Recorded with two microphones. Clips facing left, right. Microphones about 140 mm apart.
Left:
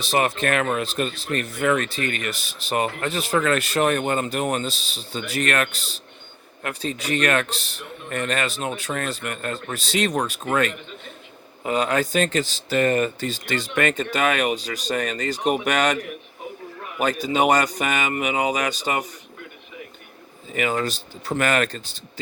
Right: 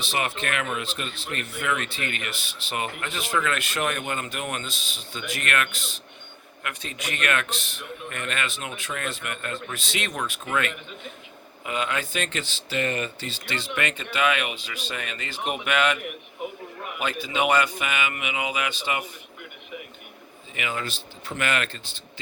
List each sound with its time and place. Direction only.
0.0 s speech: 40° left (ahead or behind)
20.5 s speech: 40° left (ahead or behind)